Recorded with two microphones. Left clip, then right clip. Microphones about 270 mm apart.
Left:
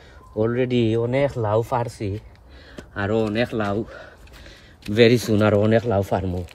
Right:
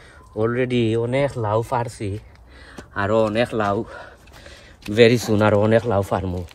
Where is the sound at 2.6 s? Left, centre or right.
Centre.